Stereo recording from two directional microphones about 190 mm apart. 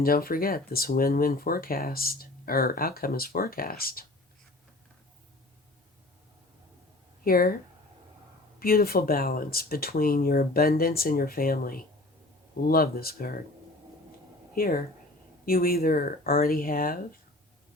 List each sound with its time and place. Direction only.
0.0 s speech: 50° left (ahead or behind)
7.3 s speech: 50° left (ahead or behind)
8.5 s speech: 50° left (ahead or behind)
14.5 s speech: 50° left (ahead or behind)